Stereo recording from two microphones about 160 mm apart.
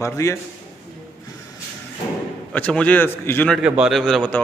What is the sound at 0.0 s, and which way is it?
Speech, 20° left (ahead or behind).